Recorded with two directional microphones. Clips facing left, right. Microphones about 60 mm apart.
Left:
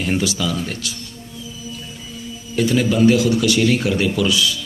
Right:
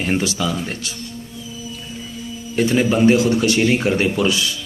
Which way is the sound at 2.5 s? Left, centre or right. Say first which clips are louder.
Right 1 dB; right.